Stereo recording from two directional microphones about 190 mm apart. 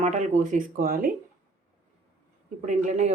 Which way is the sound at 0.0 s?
40° right (ahead or behind).